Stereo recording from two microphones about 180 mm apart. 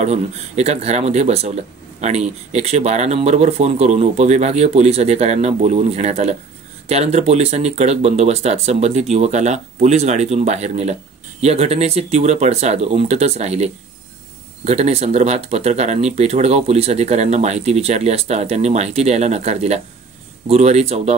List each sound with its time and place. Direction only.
0.0 s speech: 40° right (ahead or behind)